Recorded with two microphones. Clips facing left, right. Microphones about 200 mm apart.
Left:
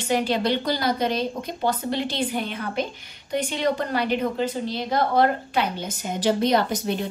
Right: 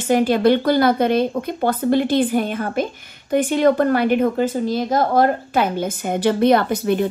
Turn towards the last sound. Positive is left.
turn(degrees=-55)  # may be behind; listen again after turning